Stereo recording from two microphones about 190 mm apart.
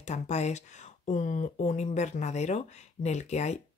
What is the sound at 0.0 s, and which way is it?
Speech, 35° left (ahead or behind).